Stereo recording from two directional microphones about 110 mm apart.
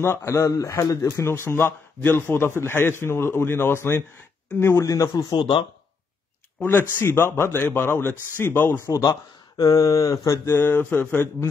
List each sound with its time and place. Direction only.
0.0 s a man's voice: 20° left (ahead or behind)
5.3 s speech: 40° left (ahead or behind)
6.6 s a man's voice: 15° left (ahead or behind)